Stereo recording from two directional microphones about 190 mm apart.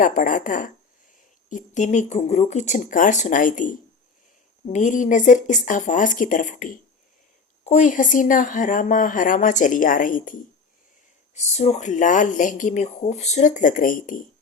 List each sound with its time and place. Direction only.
0.0 s speech: 45° left (ahead or behind)